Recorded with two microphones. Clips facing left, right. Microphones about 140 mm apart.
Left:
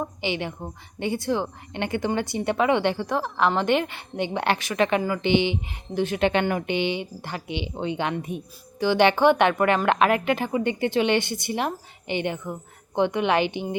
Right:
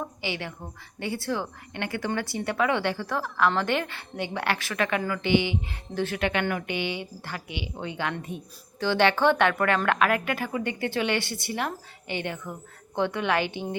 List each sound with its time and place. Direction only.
0.0 s a woman's voice: 20° left (ahead or behind)